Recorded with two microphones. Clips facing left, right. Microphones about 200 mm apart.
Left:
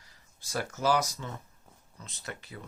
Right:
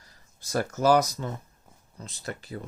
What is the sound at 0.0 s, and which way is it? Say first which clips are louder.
Speech: right 3 dB; 40° right (ahead or behind).